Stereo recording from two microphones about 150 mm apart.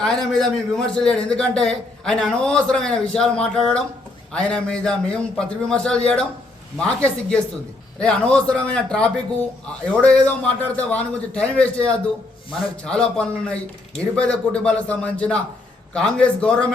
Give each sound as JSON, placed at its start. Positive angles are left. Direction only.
{"t": 0.0, "sound": "a man's voice", "side_deg": 5}